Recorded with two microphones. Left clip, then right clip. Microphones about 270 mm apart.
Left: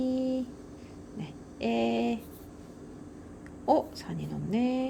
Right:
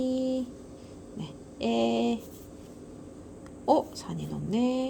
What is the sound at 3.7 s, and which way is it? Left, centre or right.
Speech, centre.